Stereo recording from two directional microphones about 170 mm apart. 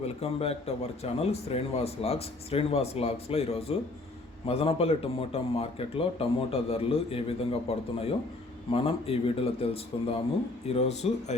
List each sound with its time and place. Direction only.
0.0 s a man's voice: 35° left (ahead or behind)